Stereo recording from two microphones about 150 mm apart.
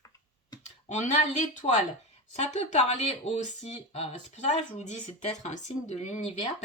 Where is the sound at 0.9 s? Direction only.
55° left (ahead or behind).